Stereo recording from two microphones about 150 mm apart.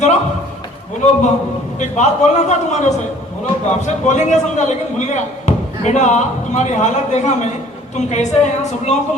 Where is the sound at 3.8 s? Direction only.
50° left (ahead or behind).